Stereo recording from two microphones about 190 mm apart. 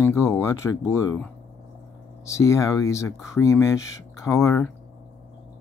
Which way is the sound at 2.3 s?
15° left (ahead or behind).